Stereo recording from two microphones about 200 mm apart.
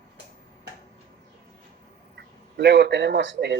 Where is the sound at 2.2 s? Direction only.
60° right (ahead or behind).